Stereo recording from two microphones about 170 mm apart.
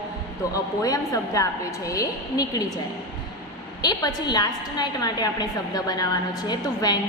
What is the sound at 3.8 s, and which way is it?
A woman's voice, 25° left (ahead or behind).